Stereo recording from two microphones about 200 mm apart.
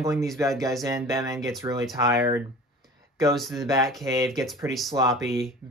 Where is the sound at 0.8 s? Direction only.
15° right (ahead or behind).